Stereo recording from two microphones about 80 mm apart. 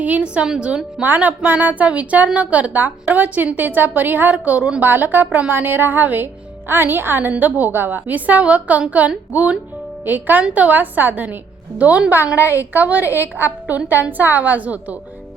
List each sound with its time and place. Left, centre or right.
0.0 s a woman's voice: centre